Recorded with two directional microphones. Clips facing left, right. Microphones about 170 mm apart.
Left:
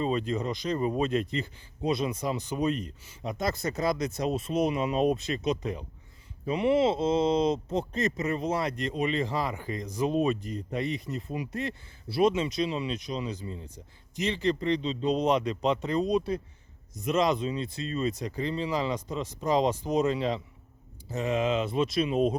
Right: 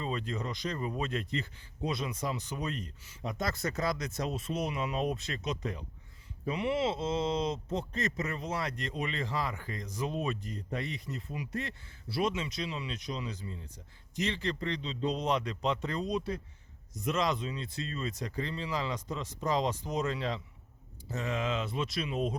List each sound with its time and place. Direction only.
0.0 s a man's voice: 20° left (ahead or behind)